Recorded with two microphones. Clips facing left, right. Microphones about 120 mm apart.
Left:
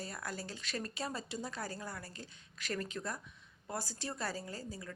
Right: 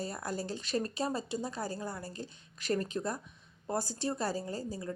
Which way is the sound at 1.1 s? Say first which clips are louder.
Right 6 dB; 15° right (ahead or behind).